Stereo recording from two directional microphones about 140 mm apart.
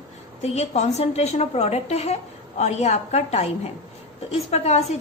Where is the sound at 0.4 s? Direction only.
50° left (ahead or behind).